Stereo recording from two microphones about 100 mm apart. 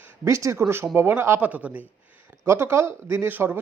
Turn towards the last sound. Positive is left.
turn(degrees=-20)  # may be behind; listen again after turning